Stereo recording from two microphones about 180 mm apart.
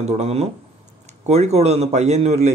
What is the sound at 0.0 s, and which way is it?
A man's voice, 35° right (ahead or behind).